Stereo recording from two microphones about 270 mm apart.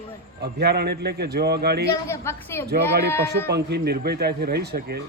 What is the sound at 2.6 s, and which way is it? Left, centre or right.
Speech, right.